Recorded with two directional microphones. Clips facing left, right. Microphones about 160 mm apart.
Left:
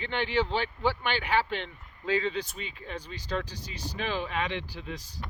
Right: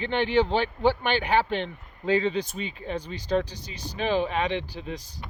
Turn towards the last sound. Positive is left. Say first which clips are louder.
# right 5 dB
turn(degrees=-20)  # may be behind; listen again after turning